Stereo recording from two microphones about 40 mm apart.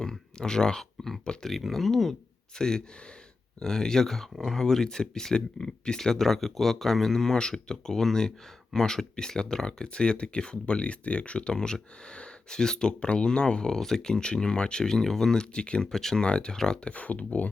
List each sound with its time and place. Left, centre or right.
0.0 s a sound: centre
1.2 s speech: left
1.7 s speech: centre
2.6 s speech: centre
15.9 s speech: centre
16.2 s speech: left
16.9 s speech: left